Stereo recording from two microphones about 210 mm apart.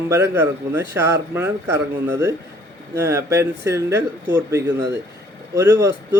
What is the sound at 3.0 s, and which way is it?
A man's voice, 15° right (ahead or behind).